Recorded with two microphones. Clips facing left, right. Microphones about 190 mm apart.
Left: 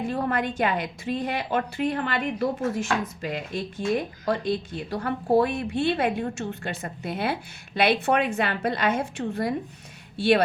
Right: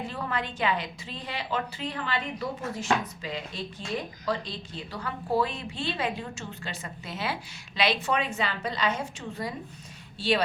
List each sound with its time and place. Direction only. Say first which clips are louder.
0.1 s a woman's voice: left 7 dB; 50° left (ahead or behind)